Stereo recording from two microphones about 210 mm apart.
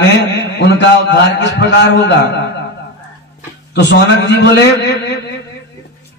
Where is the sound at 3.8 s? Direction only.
55° left (ahead or behind).